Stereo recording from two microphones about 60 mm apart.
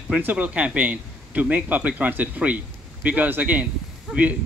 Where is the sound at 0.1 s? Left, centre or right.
Right.